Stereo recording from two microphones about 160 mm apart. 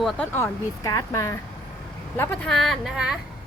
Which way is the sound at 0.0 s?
Centre (ahead or behind).